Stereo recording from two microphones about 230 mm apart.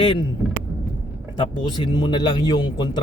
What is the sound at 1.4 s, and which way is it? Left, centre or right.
Speech, left.